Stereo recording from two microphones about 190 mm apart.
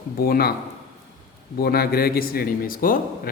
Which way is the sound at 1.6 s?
55° left (ahead or behind).